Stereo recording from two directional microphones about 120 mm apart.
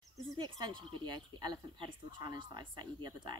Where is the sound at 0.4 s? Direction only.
40° right (ahead or behind).